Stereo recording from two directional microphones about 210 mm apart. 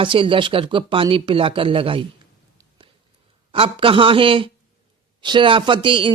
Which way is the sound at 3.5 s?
25° right (ahead or behind).